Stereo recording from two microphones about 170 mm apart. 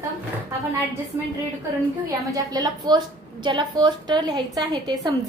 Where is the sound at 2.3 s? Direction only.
20° right (ahead or behind).